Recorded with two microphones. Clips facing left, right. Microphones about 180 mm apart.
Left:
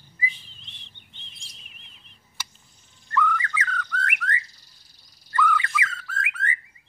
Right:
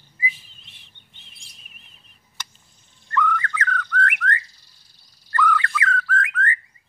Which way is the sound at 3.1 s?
5° left (ahead or behind).